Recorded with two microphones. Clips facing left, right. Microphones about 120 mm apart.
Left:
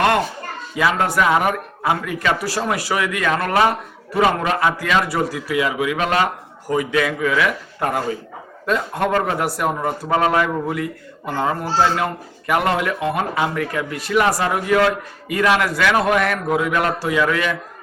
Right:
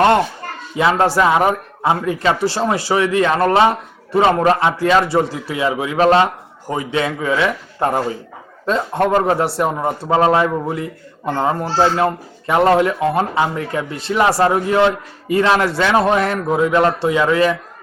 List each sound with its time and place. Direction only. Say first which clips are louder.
0.8 s a man's voice: right 4 dB; 30° right (ahead or behind)